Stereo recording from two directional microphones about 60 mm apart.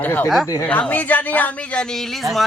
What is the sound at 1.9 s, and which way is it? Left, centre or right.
Speech, centre.